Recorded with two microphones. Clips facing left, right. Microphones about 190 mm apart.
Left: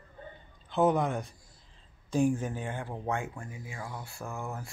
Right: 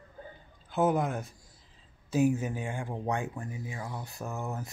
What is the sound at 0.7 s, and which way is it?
Speech, 5° right (ahead or behind).